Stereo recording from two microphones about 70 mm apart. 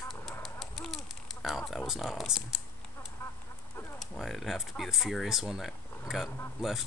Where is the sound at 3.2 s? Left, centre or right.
Left.